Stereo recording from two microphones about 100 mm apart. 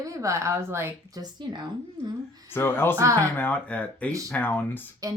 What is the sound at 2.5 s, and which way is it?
Speech, 20° left (ahead or behind).